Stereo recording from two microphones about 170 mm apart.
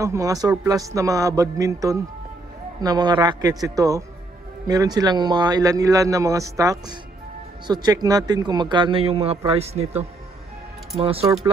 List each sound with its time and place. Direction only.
0.0 s a man's voice: 20° right (ahead or behind); by 11.2 s 35° right (ahead or behind)